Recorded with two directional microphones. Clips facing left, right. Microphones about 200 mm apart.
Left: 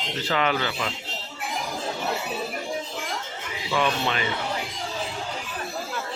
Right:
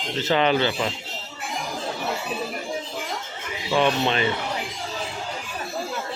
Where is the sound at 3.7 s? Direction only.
25° right (ahead or behind).